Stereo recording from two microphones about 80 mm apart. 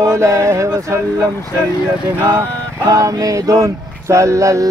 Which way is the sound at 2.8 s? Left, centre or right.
Right.